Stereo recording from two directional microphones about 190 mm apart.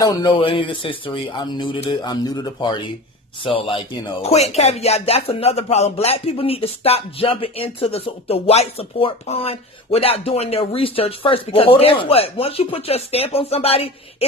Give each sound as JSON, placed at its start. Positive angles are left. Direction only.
{"t": 0.0, "sound": "a man's voice", "side_deg": 20}
{"t": 4.2, "sound": "speech", "side_deg": 35}